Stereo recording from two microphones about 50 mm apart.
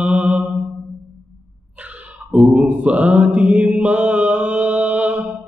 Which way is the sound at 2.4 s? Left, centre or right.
Right.